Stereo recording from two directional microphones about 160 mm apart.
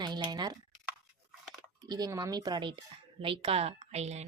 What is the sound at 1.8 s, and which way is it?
A woman's voice, 25° right (ahead or behind).